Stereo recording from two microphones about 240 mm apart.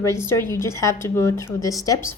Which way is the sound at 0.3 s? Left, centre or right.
Centre.